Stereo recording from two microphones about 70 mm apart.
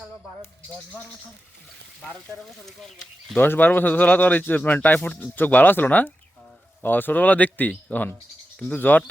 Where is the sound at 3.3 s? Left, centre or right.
Left.